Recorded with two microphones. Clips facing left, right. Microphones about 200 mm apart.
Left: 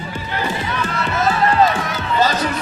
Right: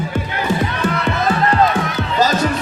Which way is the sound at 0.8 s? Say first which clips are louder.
Right 1 dB; 50° right (ahead or behind).